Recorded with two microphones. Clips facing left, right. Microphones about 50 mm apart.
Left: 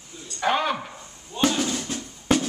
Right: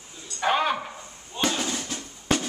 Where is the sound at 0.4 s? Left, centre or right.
Centre.